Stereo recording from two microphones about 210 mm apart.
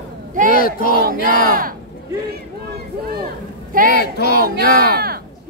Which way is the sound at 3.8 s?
50° left (ahead or behind).